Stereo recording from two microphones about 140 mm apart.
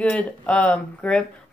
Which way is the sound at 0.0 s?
10° left (ahead or behind).